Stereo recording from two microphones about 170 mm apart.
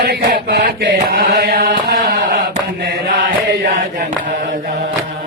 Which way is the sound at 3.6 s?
55° right (ahead or behind).